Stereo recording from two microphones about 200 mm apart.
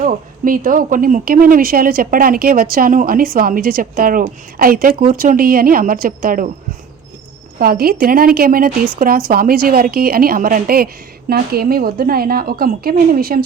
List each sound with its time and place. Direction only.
0.0 s a woman's voice: 45° right (ahead or behind)
7.6 s a woman's voice: 50° right (ahead or behind)